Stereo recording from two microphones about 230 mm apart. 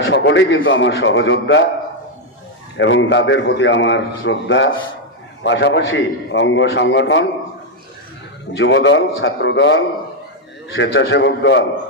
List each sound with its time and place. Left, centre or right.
0.0 s a man's voice: left
2.7 s a man's voice: left
8.5 s a man's voice: left